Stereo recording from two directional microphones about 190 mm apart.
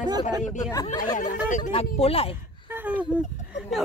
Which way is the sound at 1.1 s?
40° left (ahead or behind).